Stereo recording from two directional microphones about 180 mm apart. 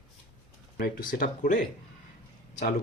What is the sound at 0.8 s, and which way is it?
Speech, 55° left (ahead or behind).